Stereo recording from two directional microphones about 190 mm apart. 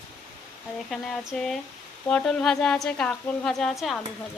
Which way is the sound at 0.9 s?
5° left (ahead or behind).